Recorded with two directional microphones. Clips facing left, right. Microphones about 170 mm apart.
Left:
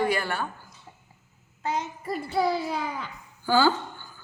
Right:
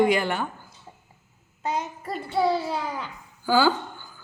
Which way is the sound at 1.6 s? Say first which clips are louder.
Right 1 dB; 15° right (ahead or behind).